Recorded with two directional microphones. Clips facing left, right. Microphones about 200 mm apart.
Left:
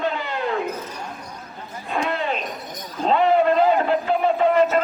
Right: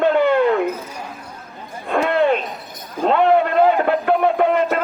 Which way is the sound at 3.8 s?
60° right (ahead or behind).